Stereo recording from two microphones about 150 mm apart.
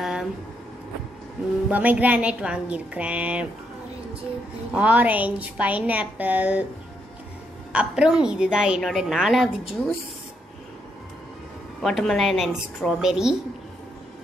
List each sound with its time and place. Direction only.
0.0 s vehicle: centre (ahead or behind)
1.7 s a woman's voice: 10° right (ahead or behind)
4.7 s a woman's voice: 10° right (ahead or behind)
7.7 s a woman's voice: 5° right (ahead or behind)
11.8 s a woman's voice: centre (ahead or behind)